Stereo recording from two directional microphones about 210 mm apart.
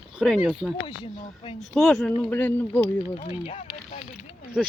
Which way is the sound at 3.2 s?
30° left (ahead or behind).